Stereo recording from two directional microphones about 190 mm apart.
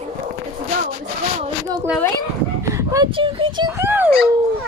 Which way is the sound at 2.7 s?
20° right (ahead or behind).